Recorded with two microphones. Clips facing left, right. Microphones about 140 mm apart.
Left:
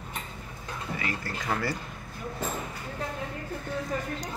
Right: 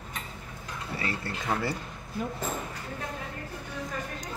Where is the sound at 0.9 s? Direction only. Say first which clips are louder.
Right 1 dB; 30° right (ahead or behind).